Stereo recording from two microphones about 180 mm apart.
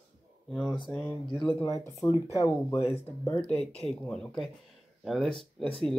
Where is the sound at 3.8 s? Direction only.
5° left (ahead or behind).